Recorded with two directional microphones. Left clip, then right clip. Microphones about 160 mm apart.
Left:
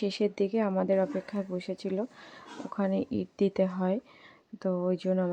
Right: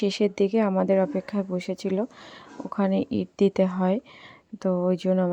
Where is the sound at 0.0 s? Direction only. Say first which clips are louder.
Right 6 dB; 25° right (ahead or behind).